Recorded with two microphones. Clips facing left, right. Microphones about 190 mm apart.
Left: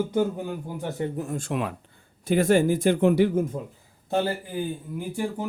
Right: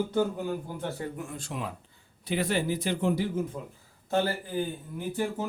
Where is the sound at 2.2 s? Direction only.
45° left (ahead or behind); by 3.4 s 65° left (ahead or behind).